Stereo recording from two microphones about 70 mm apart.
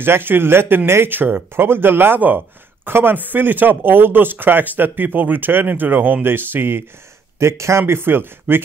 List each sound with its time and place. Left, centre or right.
0.0 s speech: right
7.3 s speech: right
7.8 s speech: right